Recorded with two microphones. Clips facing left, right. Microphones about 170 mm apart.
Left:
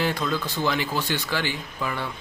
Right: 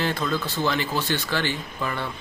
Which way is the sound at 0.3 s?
15° left (ahead or behind).